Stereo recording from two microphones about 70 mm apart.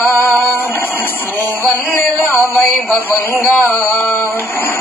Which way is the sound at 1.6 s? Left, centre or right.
Left.